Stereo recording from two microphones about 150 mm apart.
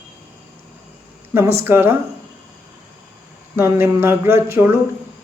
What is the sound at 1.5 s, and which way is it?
Speech, 15° right (ahead or behind).